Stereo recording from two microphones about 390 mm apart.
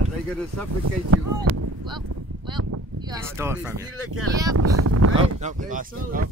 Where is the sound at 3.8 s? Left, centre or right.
Right.